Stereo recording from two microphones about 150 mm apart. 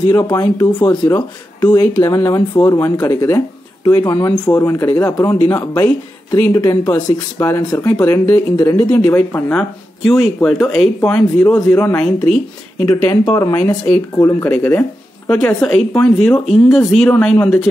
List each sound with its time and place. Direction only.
0.1 s speech: 20° left (ahead or behind)
13.3 s speech: 20° left (ahead or behind)